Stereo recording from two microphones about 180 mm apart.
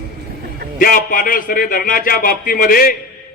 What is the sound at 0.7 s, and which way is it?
Speech, 50° left (ahead or behind).